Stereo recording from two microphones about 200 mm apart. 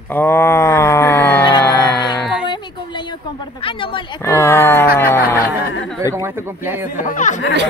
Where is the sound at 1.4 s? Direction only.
20° left (ahead or behind).